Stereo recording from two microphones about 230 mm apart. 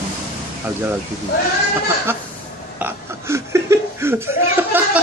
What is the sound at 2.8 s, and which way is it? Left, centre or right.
Chuckle, centre.